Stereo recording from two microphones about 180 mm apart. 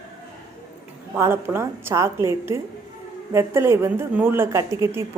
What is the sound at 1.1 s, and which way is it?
Speech, 10° right (ahead or behind).